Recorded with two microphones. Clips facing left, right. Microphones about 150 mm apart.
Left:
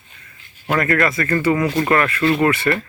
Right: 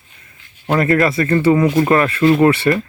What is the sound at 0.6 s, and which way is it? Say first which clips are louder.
Speech: right 4 dB; 30° right (ahead or behind).